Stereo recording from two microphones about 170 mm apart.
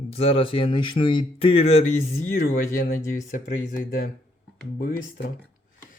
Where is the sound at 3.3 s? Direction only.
50° left (ahead or behind).